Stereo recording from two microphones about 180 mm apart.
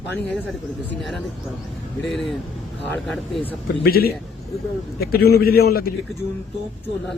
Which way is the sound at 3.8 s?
55° left (ahead or behind).